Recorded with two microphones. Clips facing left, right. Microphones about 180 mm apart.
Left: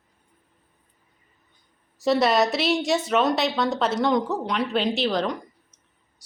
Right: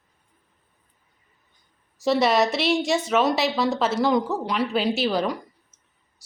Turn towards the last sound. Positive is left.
turn(degrees=-5)  # may be behind; listen again after turning